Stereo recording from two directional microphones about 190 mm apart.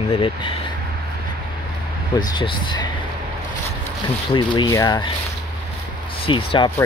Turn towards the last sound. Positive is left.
turn(degrees=25)  # may be behind; listen again after turning